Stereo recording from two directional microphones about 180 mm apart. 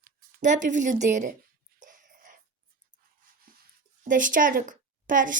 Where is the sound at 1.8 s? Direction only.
50° right (ahead or behind).